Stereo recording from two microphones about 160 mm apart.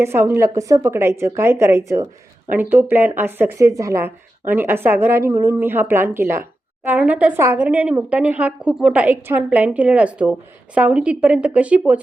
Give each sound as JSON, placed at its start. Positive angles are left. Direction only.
{"t": 0.0, "sound": "speech", "side_deg": -15}